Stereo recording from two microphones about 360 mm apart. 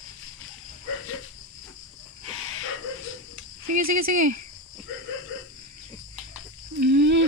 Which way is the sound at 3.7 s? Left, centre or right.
Right.